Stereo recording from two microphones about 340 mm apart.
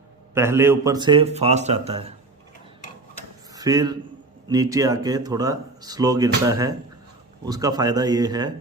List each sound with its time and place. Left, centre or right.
0.3 s speech: centre
3.5 s a man's voice: centre